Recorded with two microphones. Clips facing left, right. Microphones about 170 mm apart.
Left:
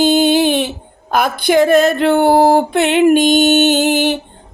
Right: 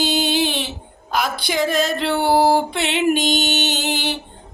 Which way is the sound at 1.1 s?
55° left (ahead or behind).